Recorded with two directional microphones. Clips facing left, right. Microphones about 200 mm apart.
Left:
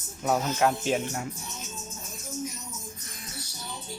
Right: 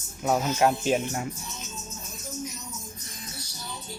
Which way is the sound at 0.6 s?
20° right (ahead or behind).